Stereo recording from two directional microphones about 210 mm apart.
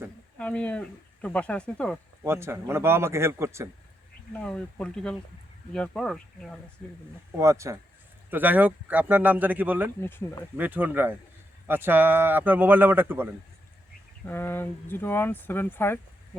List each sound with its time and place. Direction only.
0.3 s speech: 5° left (ahead or behind)
2.2 s speech: 10° right (ahead or behind)
4.3 s speech: 5° left (ahead or behind)
7.3 s speech: 15° right (ahead or behind)
10.0 s speech: 10° left (ahead or behind)
10.6 s speech: 10° right (ahead or behind)
14.3 s speech: 10° left (ahead or behind)